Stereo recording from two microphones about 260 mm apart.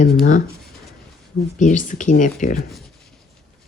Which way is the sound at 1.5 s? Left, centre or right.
Left.